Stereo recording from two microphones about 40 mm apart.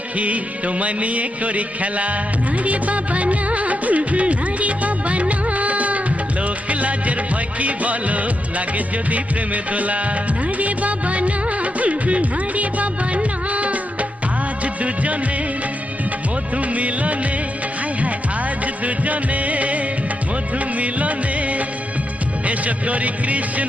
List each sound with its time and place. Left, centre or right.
0.2 s music: right
7.6 s music of bollywood: right
9.1 s music: right
10.6 s music of bollywood: right
16.6 s music of bollywood: right
18.6 s music: right
20.7 s music of bollywood: right
22.4 s music: right